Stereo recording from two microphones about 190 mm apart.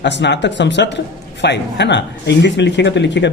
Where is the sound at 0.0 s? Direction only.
65° left (ahead or behind).